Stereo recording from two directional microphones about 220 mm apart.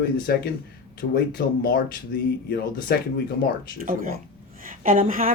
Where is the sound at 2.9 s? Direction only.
45° left (ahead or behind).